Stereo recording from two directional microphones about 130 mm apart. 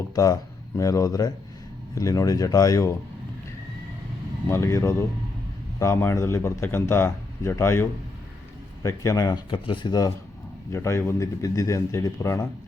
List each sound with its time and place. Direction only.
0.8 s speech: 25° left (ahead or behind)
4.4 s speech: 20° left (ahead or behind)
10.7 s speech: 20° left (ahead or behind)